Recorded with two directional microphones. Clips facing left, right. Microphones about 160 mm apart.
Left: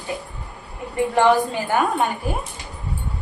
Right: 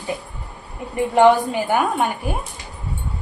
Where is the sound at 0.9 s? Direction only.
15° right (ahead or behind).